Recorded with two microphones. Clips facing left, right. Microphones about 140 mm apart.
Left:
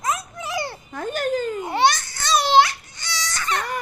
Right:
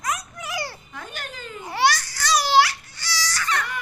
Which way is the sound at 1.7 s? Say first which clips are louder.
Even; 20° left (ahead or behind).